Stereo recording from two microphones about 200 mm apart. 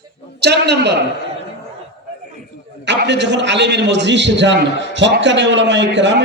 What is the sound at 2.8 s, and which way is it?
A man's voice, 60° right (ahead or behind).